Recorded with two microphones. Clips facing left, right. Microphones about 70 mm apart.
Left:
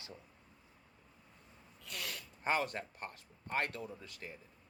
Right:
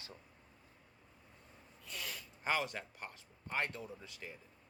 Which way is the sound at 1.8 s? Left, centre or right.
Left.